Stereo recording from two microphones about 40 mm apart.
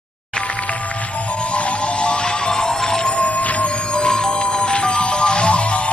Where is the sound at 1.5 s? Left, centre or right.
Left.